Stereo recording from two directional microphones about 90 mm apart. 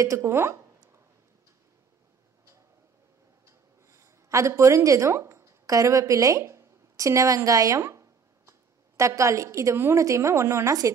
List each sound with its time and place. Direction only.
0.0 s speech: 35° right (ahead or behind)
3.4 s a woman's voice: 30° right (ahead or behind)